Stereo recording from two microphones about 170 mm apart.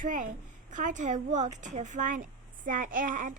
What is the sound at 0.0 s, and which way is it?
Speech, 50° right (ahead or behind).